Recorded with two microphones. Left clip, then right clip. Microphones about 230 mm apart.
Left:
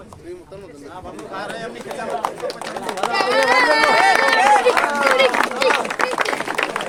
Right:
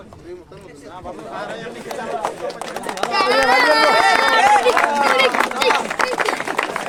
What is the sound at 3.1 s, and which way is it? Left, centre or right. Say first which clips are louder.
Run: right 2 dB; right.